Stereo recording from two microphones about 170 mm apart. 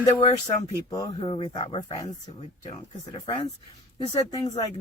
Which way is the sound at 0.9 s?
25° left (ahead or behind).